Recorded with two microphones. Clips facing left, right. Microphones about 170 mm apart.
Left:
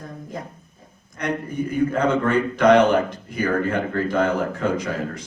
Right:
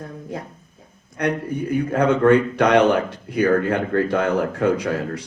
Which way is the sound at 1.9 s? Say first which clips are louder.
Right 9 dB; 60° right (ahead or behind).